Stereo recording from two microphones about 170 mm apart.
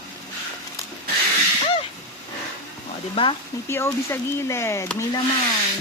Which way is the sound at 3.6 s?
15° left (ahead or behind).